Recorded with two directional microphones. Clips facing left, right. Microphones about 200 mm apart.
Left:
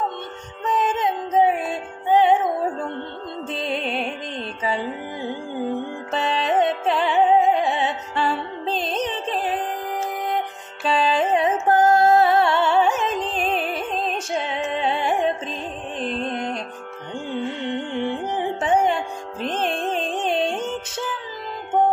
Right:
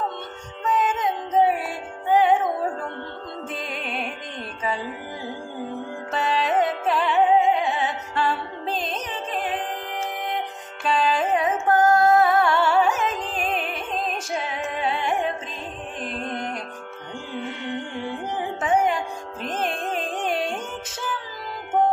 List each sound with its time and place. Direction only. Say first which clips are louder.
0.7 s music: left 1 dB; 35° left (ahead or behind)
1.0 s music: left 2 dB; 20° left (ahead or behind)
3.5 s music: left 7 dB; 25° left (ahead or behind)
6.1 s music: left 1 dB; 30° left (ahead or behind)
7.7 s music: left 2 dB; 25° left (ahead or behind)
10.8 s music: left 2 dB; 30° left (ahead or behind)